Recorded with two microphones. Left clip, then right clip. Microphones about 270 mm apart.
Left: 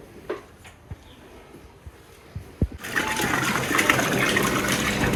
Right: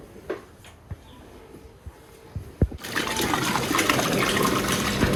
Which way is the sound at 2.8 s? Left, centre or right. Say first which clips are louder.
Left 3 dB; right.